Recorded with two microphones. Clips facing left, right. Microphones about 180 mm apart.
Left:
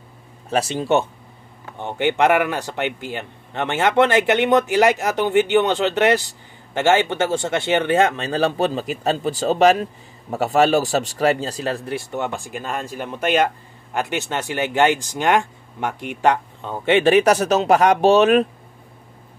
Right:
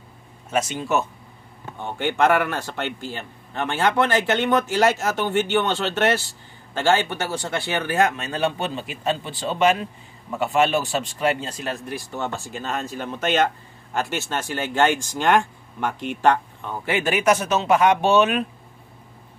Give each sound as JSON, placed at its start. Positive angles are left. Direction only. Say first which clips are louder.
{"t": 0.5, "sound": "speech", "louder": "left 4 dB", "side_deg": 35}
{"t": 1.8, "sound": "speech", "louder": "left 3 dB", "side_deg": 20}